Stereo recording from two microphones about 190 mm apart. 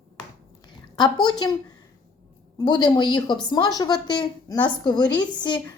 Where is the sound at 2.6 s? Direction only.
20° left (ahead or behind).